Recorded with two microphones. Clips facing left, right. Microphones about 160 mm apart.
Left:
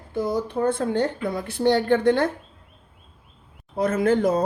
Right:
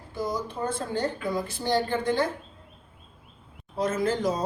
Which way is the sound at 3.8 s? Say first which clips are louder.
Left 5 dB; 60° left (ahead or behind).